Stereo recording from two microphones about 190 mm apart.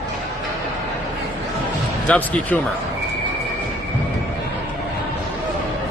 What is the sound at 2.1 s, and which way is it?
Speech, 10° left (ahead or behind).